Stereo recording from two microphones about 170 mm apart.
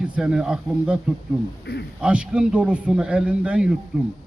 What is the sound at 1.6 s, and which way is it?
Speech, 80° left.